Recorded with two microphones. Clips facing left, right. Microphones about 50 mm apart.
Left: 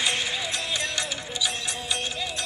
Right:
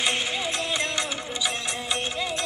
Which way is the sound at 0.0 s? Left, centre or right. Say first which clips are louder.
Right 1 dB; right.